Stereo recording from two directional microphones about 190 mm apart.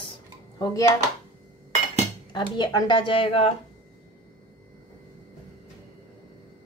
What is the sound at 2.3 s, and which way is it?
Speech, 25° left (ahead or behind).